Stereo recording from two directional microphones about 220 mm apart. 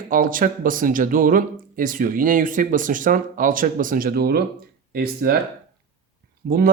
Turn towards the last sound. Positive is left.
turn(degrees=-40)  # may be behind; listen again after turning